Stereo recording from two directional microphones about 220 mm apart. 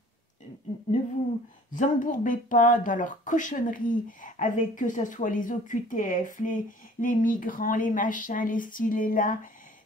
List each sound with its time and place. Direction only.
1.7 s speech: 35° left (ahead or behind)